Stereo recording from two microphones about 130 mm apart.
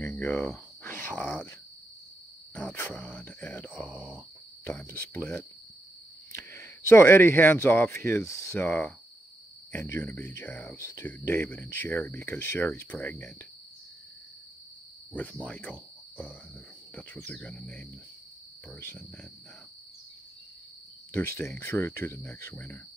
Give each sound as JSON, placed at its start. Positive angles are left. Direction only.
{"t": 0.0, "sound": "cricket", "side_deg": 15}
{"t": 1.1, "sound": "speech", "side_deg": 10}
{"t": 2.8, "sound": "speech", "side_deg": 15}
{"t": 3.7, "sound": "speech", "side_deg": -10}
{"t": 4.8, "sound": "speech", "side_deg": 20}
{"t": 6.5, "sound": "speech", "side_deg": 20}
{"t": 15.1, "sound": "speech", "side_deg": 10}
{"t": 16.9, "sound": "speech", "side_deg": 10}
{"t": 21.1, "sound": "speech", "side_deg": 20}